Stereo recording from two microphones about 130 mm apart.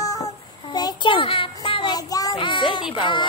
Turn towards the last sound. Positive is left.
turn(degrees=40)  # may be behind; listen again after turning